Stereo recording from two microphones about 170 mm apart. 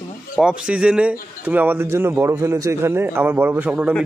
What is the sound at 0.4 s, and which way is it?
Speech, 5° right (ahead or behind).